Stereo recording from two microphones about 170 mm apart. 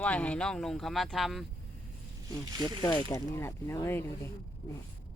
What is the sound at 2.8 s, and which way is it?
Speech, 25° left (ahead or behind).